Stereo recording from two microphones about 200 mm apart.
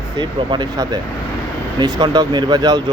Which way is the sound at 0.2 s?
20° right (ahead or behind).